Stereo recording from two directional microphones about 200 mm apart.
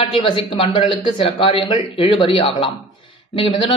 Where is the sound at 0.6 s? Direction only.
25° left (ahead or behind).